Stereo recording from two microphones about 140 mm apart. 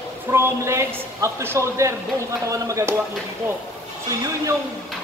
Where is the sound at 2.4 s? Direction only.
25° right (ahead or behind).